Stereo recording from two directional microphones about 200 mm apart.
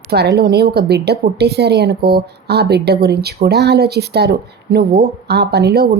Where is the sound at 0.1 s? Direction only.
55° right (ahead or behind).